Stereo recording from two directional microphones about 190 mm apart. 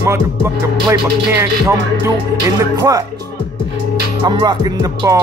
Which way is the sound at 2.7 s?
20° right (ahead or behind).